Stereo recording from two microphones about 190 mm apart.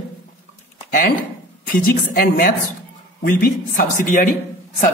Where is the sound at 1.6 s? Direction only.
50° left (ahead or behind).